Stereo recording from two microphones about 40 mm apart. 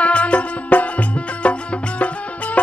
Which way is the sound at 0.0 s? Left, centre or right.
Left.